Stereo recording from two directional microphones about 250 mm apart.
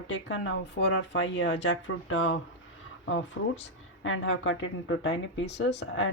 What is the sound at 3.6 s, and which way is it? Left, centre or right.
Speech, left.